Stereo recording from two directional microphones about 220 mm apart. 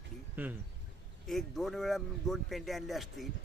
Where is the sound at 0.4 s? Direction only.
10° right (ahead or behind).